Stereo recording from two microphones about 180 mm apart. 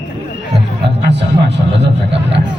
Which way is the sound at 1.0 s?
75° right (ahead or behind).